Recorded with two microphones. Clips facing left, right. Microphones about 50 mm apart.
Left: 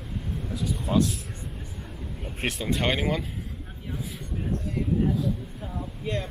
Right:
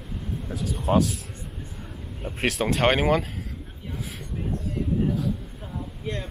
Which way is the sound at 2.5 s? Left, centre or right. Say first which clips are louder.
Right 5 dB; right.